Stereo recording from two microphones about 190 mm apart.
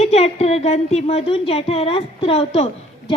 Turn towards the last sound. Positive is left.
turn(degrees=30)  # may be behind; listen again after turning